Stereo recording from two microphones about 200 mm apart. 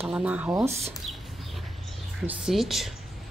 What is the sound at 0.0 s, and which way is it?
Speech, 5° right (ahead or behind).